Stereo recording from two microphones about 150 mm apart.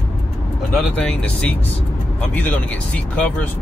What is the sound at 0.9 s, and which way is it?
Speech, 10° left (ahead or behind).